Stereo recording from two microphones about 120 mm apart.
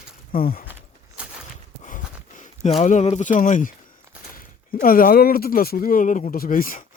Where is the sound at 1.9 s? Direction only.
90° left.